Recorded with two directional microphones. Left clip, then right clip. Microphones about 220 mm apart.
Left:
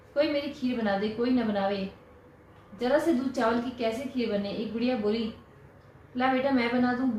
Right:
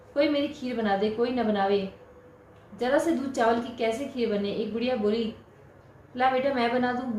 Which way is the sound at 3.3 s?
35° right (ahead or behind).